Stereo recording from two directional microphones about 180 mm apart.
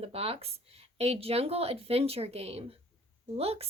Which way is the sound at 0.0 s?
35° right (ahead or behind).